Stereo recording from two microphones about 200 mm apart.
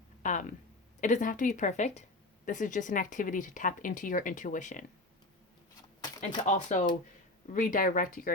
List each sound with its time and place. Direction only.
0.2 s speech: 40° left (ahead or behind)
6.4 s speech: 40° left (ahead or behind)